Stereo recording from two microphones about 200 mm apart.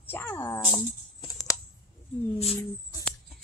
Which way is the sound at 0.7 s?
20° left (ahead or behind).